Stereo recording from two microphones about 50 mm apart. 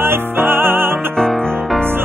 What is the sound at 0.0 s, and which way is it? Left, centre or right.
Music, right.